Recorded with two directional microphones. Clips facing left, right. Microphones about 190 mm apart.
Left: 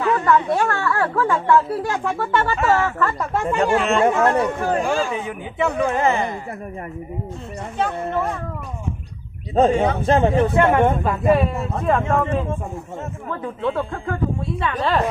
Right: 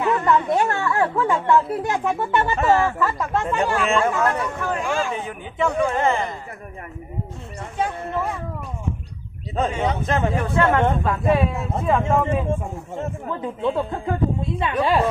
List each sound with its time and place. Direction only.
0.0 s speech: 20° right (ahead or behind)
3.0 s speech: 5° right (ahead or behind)
3.3 s speech: 10° left (ahead or behind)
3.8 s speech: 30° left (ahead or behind)
5.5 s speech: 10° left (ahead or behind)
9.6 s speech: 40° left (ahead or behind)
10.1 s speech: 30° left (ahead or behind)
10.6 s speech: 15° left (ahead or behind)
12.1 s a woman's voice: 15° right (ahead or behind)